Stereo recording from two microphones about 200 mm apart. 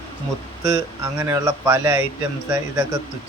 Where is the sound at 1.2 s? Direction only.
15° right (ahead or behind).